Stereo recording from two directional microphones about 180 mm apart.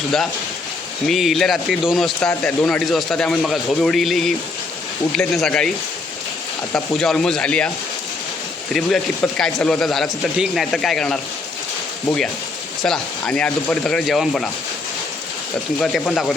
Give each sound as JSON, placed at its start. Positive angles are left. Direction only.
{"t": 1.0, "sound": "speech", "side_deg": 0}
{"t": 6.7, "sound": "speech", "side_deg": 5}
{"t": 8.7, "sound": "speech", "side_deg": 0}
{"t": 15.8, "sound": "speech", "side_deg": 0}